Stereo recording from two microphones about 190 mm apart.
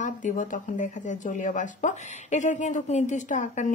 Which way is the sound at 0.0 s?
40° left (ahead or behind).